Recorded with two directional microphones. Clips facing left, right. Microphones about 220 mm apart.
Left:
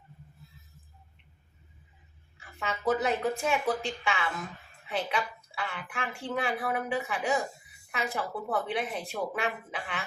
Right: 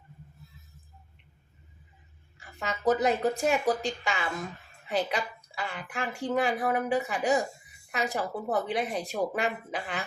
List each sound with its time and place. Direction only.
2.6 s a woman's voice: 40° right (ahead or behind)